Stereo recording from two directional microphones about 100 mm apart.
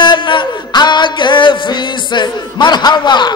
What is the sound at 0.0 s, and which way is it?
Music, 50° left (ahead or behind).